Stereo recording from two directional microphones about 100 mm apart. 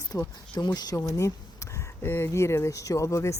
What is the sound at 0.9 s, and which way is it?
A woman's voice, 30° left (ahead or behind).